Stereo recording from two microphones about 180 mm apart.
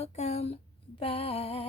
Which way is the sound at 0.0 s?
35° left (ahead or behind).